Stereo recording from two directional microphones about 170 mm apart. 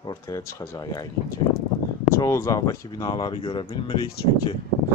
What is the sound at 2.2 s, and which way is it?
Speech, 20° left (ahead or behind).